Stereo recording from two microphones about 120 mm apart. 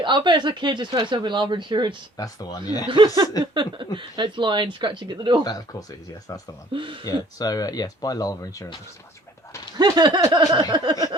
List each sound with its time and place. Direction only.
0.0 s speech: 40° right (ahead or behind)
2.1 s speech: 30° left (ahead or behind)
3.4 s speech: 40° right (ahead or behind)
5.4 s speech: 30° left (ahead or behind)
6.7 s speech: 45° right (ahead or behind)
7.0 s speech: 30° left (ahead or behind)
9.7 s speech: 35° right (ahead or behind)